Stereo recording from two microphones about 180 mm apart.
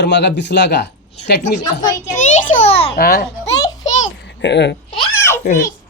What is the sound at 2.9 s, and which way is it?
Speech, 55° left (ahead or behind).